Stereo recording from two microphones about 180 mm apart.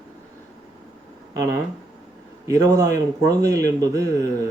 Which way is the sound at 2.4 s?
20° right (ahead or behind).